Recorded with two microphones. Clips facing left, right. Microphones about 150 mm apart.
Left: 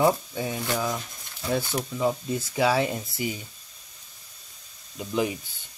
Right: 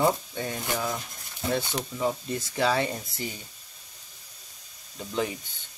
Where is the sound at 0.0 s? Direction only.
5° left (ahead or behind).